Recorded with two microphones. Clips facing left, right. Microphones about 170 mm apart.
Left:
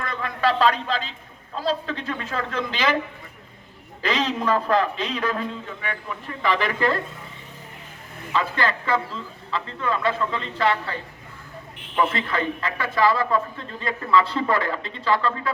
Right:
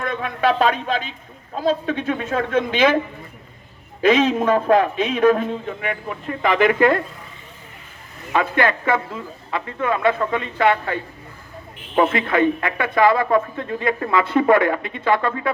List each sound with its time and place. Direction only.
0.0 s a man's voice: 55° right (ahead or behind)
4.0 s a man's voice: 55° right (ahead or behind)
8.3 s a man's voice: 55° right (ahead or behind)
11.9 s a man's voice: 55° right (ahead or behind)
14.8 s speech: 15° right (ahead or behind)
15.0 s a man's voice: 55° right (ahead or behind)